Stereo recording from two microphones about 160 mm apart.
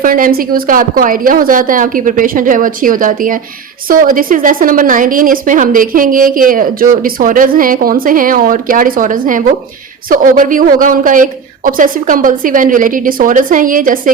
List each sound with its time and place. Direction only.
0.0 s a woman's voice: 60° right (ahead or behind)